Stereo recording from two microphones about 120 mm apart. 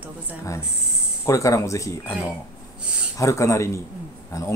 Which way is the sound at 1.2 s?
25° left (ahead or behind).